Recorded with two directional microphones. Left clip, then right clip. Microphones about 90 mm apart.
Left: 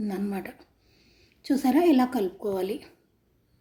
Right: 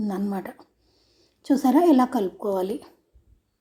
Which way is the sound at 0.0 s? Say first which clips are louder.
Right 3 dB; 20° right (ahead or behind).